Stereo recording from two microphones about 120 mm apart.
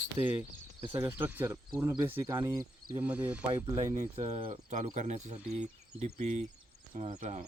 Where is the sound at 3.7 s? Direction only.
85° right.